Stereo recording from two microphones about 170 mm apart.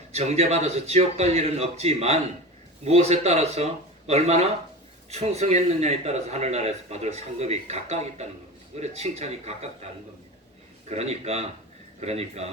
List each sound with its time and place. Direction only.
0.1 s a man's voice: 40° right (ahead or behind)